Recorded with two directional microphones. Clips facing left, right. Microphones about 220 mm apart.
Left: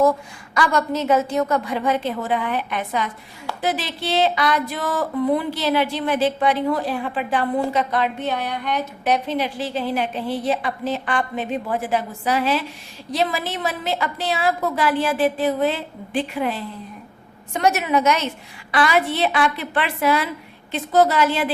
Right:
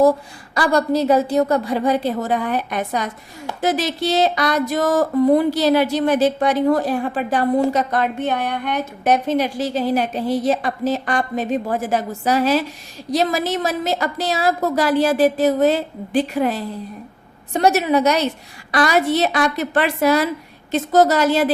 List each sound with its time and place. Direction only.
0.0 s a woman's voice: 35° right (ahead or behind)